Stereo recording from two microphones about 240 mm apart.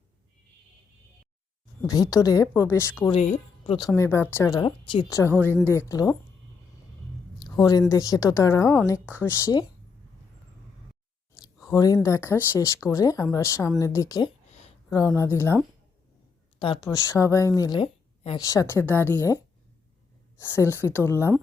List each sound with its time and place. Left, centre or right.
1.8 s a woman's voice: centre
3.0 s speech: left
3.9 s a woman's voice: centre
7.6 s a woman's voice: centre
11.6 s a woman's voice: centre
14.8 s a woman's voice: centre
16.6 s a woman's voice: centre
20.6 s a woman's voice: centre